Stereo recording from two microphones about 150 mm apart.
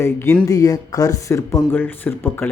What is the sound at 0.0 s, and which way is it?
A man's voice, 15° left (ahead or behind).